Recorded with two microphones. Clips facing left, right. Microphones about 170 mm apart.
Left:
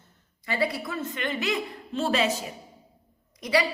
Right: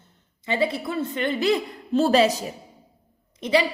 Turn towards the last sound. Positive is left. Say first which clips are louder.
# right 3 dB
turn(degrees=-25)  # may be behind; listen again after turning